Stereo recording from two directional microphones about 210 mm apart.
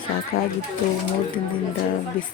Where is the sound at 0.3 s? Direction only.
45° left (ahead or behind).